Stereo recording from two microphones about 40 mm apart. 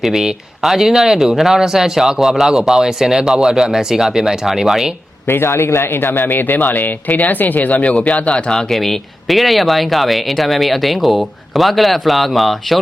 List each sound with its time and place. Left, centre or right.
0.0 s speech: centre
5.2 s a man's voice: left
6.3 s speech: left
8.5 s speech: centre